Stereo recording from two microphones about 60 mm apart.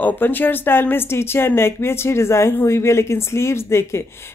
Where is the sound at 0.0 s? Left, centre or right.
Left.